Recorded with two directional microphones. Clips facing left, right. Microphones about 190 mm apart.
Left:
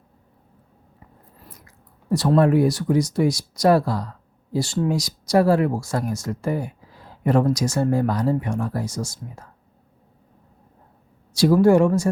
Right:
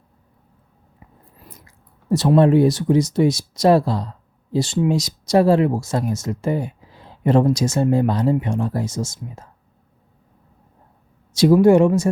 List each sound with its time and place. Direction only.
0.9 s writing: 15° right (ahead or behind)
1.5 s speech: 25° right (ahead or behind)
11.3 s speech: 20° right (ahead or behind)